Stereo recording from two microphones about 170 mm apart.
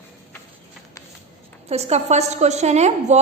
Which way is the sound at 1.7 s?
40° right (ahead or behind).